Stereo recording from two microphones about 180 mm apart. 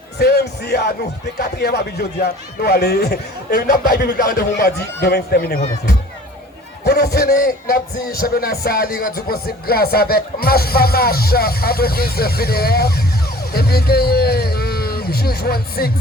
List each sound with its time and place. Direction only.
0.2 s a man's voice: 65° left (ahead or behind)